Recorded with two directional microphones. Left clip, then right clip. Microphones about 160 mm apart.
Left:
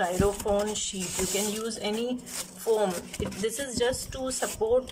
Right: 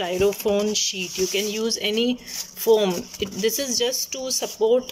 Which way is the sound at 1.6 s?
10° right (ahead or behind).